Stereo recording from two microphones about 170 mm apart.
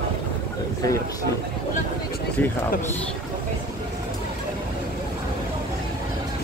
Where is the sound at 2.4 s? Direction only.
10° left (ahead or behind).